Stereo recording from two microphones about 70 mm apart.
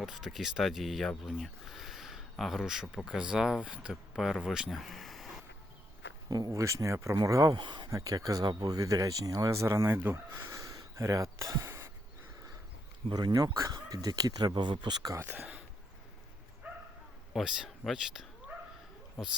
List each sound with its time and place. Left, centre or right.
0.0 s speech: centre
4.1 s speech: centre
4.7 s a sound: centre
6.2 s speech: right
7.5 s speech: right
7.9 s speech: right
10.3 s speech: right
13.1 s speech: right
17.3 s speech: centre